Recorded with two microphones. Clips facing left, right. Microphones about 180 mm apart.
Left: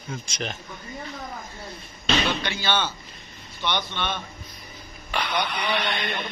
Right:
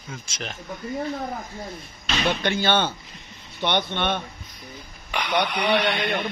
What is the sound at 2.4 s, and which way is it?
A man's voice, 50° right (ahead or behind).